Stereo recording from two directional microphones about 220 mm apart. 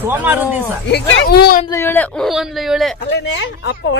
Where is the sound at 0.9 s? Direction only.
50° left (ahead or behind).